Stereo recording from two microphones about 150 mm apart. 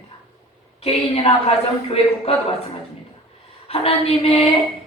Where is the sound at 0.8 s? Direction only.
40° left (ahead or behind).